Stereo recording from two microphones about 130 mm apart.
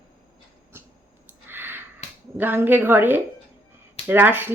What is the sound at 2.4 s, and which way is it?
A woman's voice, 15° right (ahead or behind).